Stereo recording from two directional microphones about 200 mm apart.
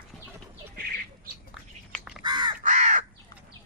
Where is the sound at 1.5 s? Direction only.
Centre (ahead or behind).